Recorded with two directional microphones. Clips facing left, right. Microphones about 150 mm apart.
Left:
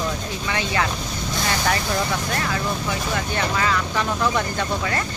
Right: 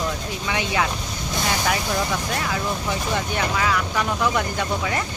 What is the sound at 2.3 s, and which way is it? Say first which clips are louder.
Speech: left 1 dB; 5° right (ahead or behind).